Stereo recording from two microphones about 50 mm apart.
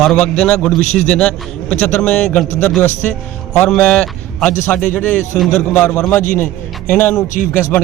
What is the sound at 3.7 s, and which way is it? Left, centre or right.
Speech, centre.